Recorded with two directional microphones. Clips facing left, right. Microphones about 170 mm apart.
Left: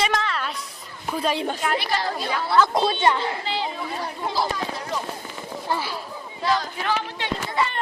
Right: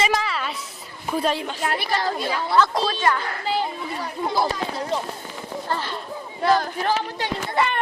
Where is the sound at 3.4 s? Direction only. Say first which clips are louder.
Right 4 dB; 50° right (ahead or behind).